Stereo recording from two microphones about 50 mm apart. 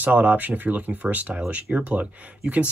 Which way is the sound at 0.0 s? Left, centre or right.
Right.